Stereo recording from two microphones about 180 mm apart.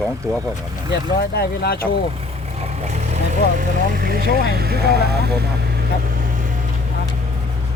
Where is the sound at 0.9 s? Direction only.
65° left (ahead or behind).